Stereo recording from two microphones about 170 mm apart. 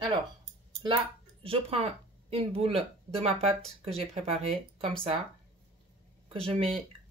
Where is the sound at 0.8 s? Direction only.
30° right (ahead or behind).